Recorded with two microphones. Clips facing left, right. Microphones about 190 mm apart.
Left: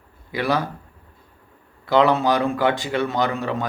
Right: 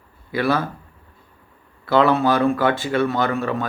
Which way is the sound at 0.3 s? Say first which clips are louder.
Right 2 dB; 15° left (ahead or behind).